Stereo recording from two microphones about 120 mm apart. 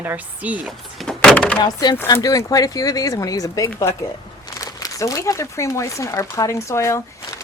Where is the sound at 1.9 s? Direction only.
25° left (ahead or behind).